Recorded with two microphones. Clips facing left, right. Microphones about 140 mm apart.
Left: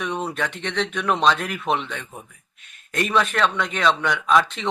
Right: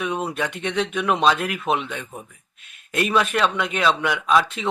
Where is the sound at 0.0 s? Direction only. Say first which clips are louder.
Right 1 dB; 5° right (ahead or behind).